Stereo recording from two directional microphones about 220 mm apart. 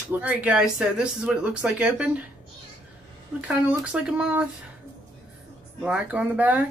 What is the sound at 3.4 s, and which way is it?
Speech, 5° right (ahead or behind).